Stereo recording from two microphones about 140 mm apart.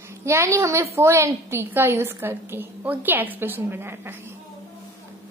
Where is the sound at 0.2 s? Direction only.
20° right (ahead or behind).